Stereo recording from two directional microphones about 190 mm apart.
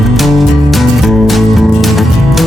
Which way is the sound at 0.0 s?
Centre (ahead or behind).